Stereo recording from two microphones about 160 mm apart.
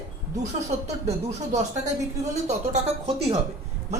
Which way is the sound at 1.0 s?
45° right (ahead or behind).